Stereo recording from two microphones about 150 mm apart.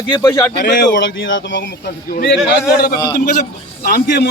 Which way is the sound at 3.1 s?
70° left (ahead or behind).